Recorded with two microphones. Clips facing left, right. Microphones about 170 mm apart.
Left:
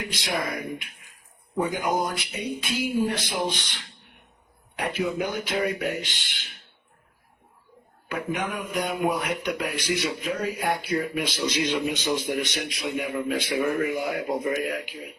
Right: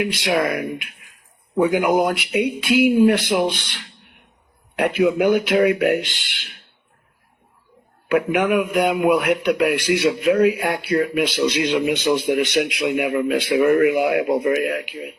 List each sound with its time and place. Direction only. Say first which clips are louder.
0.0 s a man's voice: right 9 dB; 75° right (ahead or behind)
4.8 s a man's voice: right 10 dB; 75° right (ahead or behind)
8.1 s a man's voice: right 12 dB; 75° right (ahead or behind)